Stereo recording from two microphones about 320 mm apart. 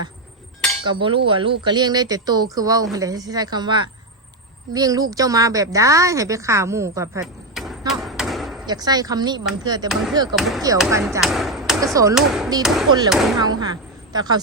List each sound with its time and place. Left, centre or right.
0.9 s a woman's voice: centre
8.6 s speech: centre
9.9 s speech: centre
13.4 s a woman's voice: centre